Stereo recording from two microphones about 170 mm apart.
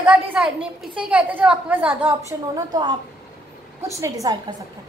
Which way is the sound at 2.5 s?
25° right (ahead or behind).